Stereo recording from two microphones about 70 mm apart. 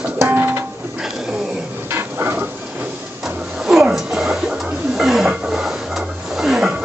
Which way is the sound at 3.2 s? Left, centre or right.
Centre.